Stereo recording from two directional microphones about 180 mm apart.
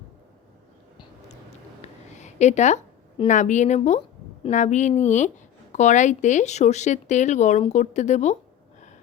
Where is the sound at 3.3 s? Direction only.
45° left (ahead or behind).